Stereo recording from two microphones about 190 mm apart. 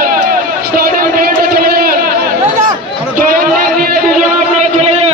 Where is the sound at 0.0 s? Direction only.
50° right (ahead or behind).